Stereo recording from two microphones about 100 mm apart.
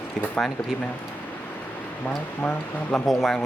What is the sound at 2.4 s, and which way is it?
Speech, 15° left (ahead or behind).